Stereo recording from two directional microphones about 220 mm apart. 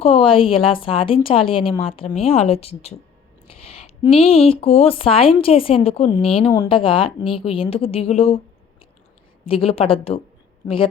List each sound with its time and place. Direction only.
0.0 s speech: 25° left (ahead or behind)
9.5 s speech: 25° left (ahead or behind)